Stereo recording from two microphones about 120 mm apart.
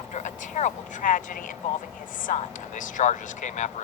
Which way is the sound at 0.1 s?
90° left.